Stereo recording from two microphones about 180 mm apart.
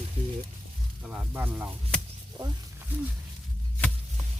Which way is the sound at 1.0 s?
5° right (ahead or behind).